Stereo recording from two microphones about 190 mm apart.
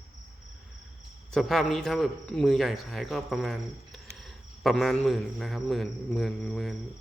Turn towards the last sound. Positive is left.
turn(degrees=0)  # may be behind; listen again after turning